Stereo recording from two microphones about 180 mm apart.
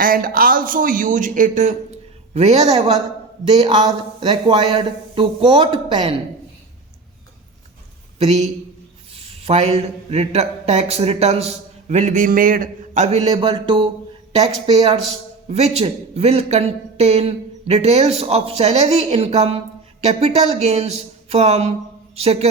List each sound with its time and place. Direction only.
0.0 s speech: 50° right (ahead or behind)
2.7 s speech: 30° right (ahead or behind)
8.2 s a man's voice: 40° right (ahead or behind)
13.3 s speech: 30° right (ahead or behind)
15.4 s speech: 35° right (ahead or behind)